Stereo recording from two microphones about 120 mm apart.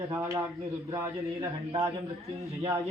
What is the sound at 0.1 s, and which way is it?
A man's voice, 25° right (ahead or behind).